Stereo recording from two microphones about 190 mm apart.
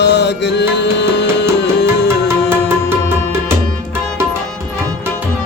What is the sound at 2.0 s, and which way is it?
Music, 10° right (ahead or behind).